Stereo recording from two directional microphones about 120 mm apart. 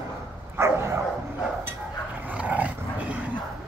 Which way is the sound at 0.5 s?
20° right (ahead or behind).